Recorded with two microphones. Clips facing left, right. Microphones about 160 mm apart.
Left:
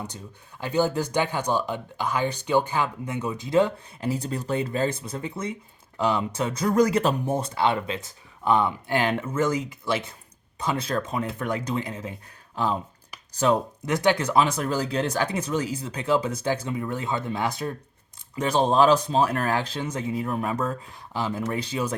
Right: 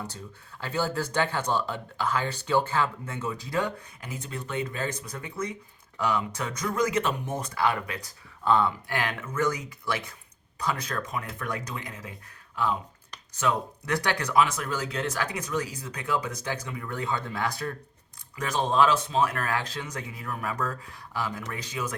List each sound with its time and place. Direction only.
0.6 s speech: 15° left (ahead or behind)
13.3 s speech: 35° left (ahead or behind)
13.8 s speech: 20° left (ahead or behind)
18.3 s speech: 30° left (ahead or behind)